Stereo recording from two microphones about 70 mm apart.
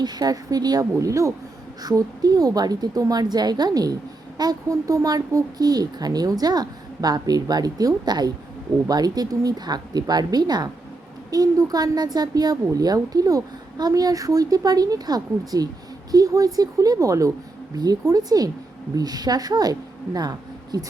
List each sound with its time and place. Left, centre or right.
0.0 s speech: right
0.9 s speech: right
1.8 s speech: right
4.7 s speech: right
17.7 s speech: right
20.1 s a sound: right